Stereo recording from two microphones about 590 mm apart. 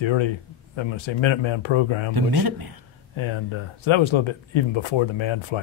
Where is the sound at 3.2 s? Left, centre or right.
Left.